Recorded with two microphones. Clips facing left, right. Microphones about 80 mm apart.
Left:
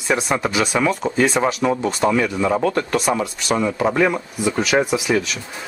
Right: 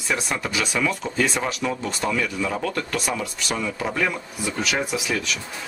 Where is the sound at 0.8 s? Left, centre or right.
Left.